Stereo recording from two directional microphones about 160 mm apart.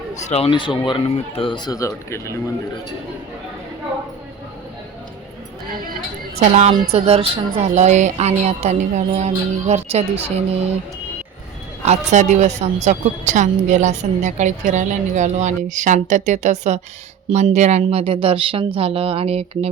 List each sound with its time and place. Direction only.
0.2 s speech: 40° left (ahead or behind); by 2.4 s 20° left (ahead or behind)
6.4 s a woman's voice: 45° right (ahead or behind)
11.9 s a woman's voice: 45° right (ahead or behind)